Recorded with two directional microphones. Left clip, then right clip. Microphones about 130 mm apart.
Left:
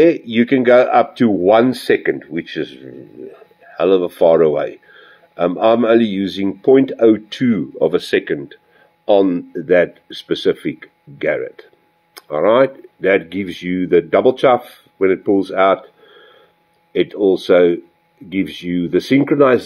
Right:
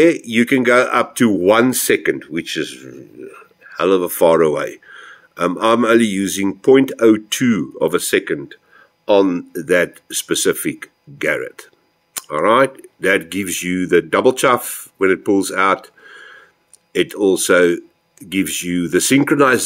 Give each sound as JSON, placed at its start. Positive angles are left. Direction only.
{"t": 0.0, "sound": "speech", "side_deg": -10}